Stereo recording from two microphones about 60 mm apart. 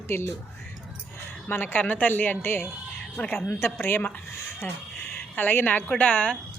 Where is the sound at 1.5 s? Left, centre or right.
Left.